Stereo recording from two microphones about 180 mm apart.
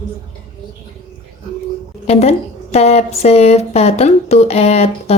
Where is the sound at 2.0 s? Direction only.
35° left (ahead or behind).